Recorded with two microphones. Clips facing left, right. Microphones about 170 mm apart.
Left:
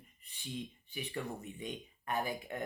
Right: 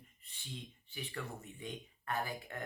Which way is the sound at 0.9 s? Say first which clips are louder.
Left 3 dB; 15° left (ahead or behind).